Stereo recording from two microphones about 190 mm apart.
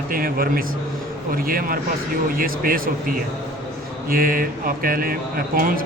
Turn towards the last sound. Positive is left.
turn(degrees=-50)  # may be behind; listen again after turning